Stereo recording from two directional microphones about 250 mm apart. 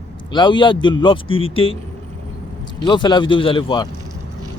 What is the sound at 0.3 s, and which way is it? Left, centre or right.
A man's voice, centre.